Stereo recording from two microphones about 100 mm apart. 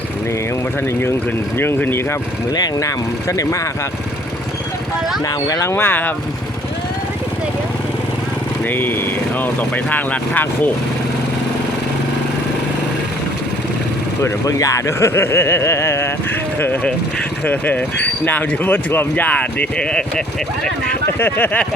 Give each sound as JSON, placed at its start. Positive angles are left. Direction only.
{"t": 1.5, "sound": "speech", "side_deg": 20}
{"t": 2.6, "sound": "speech", "side_deg": 35}
{"t": 5.5, "sound": "speech", "side_deg": 35}
{"t": 5.7, "sound": "speech", "side_deg": 20}
{"t": 8.7, "sound": "speech", "side_deg": 20}
{"t": 14.2, "sound": "speech", "side_deg": 30}
{"t": 17.4, "sound": "speech", "side_deg": 15}
{"t": 21.2, "sound": "speech", "side_deg": 20}